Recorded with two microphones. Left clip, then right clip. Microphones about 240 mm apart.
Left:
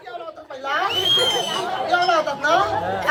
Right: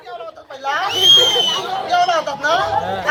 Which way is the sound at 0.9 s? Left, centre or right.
Right.